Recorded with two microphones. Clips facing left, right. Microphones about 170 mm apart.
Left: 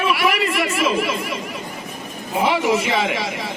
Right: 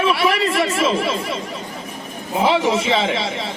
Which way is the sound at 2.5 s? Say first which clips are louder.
Right 2 dB; 25° right (ahead or behind).